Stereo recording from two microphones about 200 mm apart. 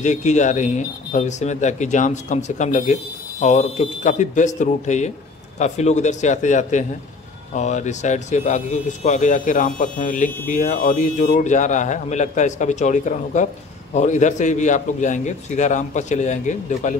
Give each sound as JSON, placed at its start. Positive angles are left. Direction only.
{"t": 0.0, "sound": "speech", "side_deg": 35}